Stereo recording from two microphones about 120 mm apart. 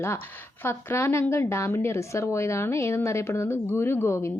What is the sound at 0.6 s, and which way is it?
A woman's voice, 20° left (ahead or behind).